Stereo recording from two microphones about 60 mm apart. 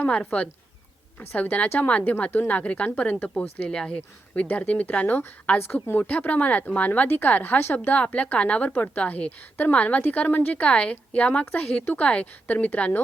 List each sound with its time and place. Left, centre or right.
0.1 s speech: centre
1.2 s a woman's voice: left
6.0 s a woman's voice: left
7.9 s a woman's voice: left